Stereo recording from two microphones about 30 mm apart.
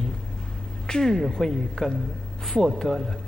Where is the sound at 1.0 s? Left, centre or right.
Centre.